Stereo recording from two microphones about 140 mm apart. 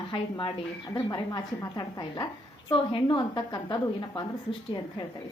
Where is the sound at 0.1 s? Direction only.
35° left (ahead or behind).